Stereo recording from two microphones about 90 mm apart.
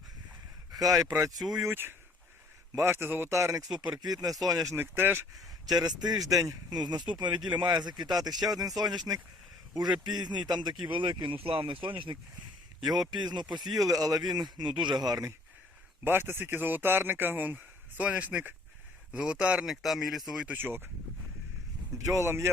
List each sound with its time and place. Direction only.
0.7 s speech: 45° right (ahead or behind)
1.6 s speech: 25° right (ahead or behind)
3.9 s speech: 50° right (ahead or behind)
4.8 s speech: 25° right (ahead or behind)
5.6 s speech: 50° right (ahead or behind); by 12.1 s 70° right (ahead or behind)
12.8 s speech: 50° right (ahead or behind)
13.7 s speech: 40° right (ahead or behind)
16.0 s speech: 25° right (ahead or behind); by 20.6 s 5° right (ahead or behind)
20.6 s speech: 25° right (ahead or behind)
21.9 s speech: 35° right (ahead or behind)